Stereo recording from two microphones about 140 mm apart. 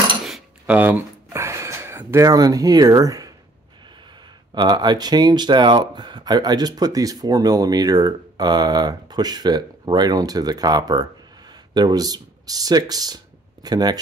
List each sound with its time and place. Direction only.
0.2 s cutlery: centre (ahead or behind)
0.7 s a sound: 15° right (ahead or behind)
4.6 s speech: 30° right (ahead or behind)